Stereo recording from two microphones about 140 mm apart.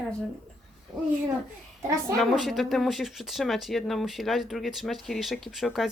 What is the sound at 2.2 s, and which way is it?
Speech, centre (ahead or behind).